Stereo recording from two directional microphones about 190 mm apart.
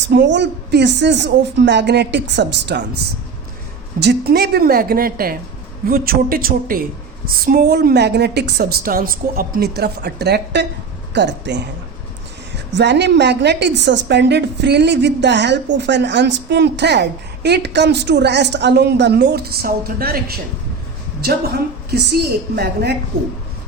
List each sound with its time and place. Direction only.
0.1 s a woman's voice: 65° right (ahead or behind)
4.0 s a woman's voice: 55° right (ahead or behind)
12.7 s a woman's voice: 65° right (ahead or behind)